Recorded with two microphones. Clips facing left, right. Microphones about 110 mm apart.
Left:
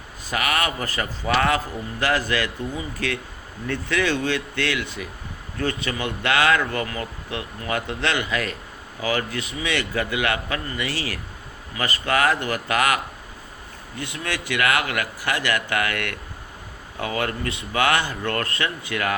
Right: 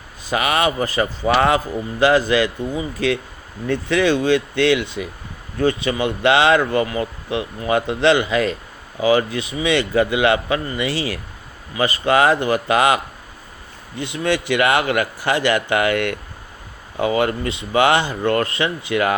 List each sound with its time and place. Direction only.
0.3 s a man's voice: 20° right (ahead or behind)
14.0 s a man's voice: 25° right (ahead or behind)